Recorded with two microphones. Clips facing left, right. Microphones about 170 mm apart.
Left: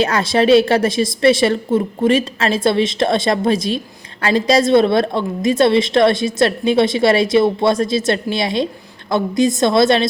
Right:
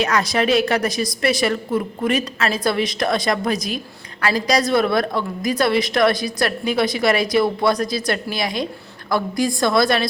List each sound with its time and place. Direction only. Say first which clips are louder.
0.0 s a woman's voice: left 4 dB; 30° left (ahead or behind)